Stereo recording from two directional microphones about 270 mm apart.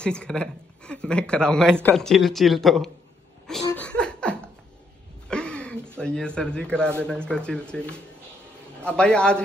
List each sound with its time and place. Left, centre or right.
0.0 s a man's voice: centre
3.6 s chuckle: centre
5.3 s a sound: centre
5.9 s a man's voice: centre